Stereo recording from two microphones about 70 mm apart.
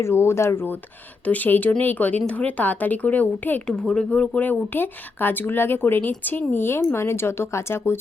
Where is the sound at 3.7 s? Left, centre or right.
Centre.